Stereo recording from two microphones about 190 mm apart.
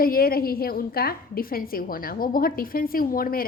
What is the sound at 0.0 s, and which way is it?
A woman's voice, 50° left (ahead or behind).